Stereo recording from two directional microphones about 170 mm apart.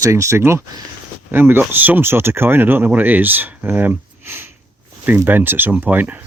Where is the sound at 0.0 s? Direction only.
15° right (ahead or behind).